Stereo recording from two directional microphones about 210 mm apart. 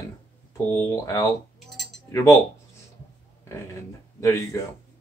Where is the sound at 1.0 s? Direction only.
15° left (ahead or behind).